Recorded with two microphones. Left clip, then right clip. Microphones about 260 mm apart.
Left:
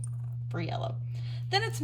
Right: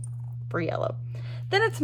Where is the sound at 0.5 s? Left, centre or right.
Centre.